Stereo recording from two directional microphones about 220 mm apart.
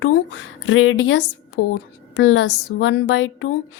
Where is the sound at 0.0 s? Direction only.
65° left (ahead or behind).